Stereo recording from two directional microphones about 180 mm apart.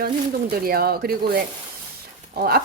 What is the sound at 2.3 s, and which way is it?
Speech, 55° right (ahead or behind).